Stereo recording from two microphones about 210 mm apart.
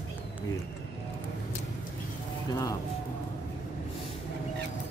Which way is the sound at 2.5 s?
15° left (ahead or behind).